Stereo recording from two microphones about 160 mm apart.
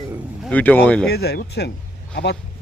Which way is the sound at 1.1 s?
85° left.